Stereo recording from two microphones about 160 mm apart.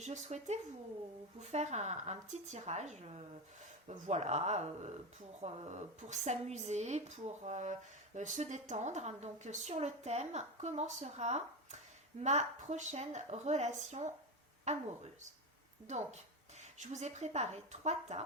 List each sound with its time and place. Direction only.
0.0 s a woman's voice: 45° right (ahead or behind)
15.9 s speech: 45° right (ahead or behind)